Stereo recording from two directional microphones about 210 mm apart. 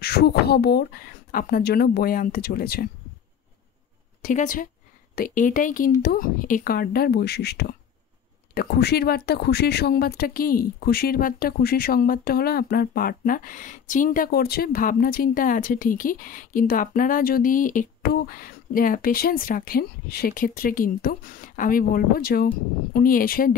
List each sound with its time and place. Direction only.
0.0 s speech: 50° left (ahead or behind)
4.2 s a woman's voice: 40° left (ahead or behind)